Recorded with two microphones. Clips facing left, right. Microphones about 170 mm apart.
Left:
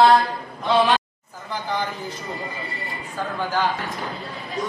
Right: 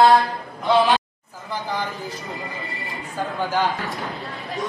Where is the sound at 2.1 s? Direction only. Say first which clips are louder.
Left 1 dB; centre (ahead or behind).